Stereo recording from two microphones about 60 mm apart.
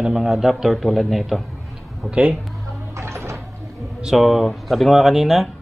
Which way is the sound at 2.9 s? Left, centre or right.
Right.